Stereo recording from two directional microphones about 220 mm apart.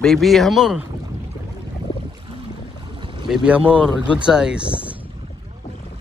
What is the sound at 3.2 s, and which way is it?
Speech, 5° right (ahead or behind).